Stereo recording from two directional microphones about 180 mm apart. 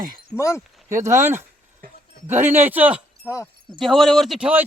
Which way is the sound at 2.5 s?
10° right (ahead or behind).